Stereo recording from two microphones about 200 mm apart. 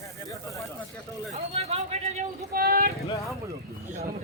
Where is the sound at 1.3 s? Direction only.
30° right (ahead or behind).